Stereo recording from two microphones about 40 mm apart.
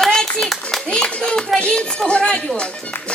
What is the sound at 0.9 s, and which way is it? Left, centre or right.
Speech, left.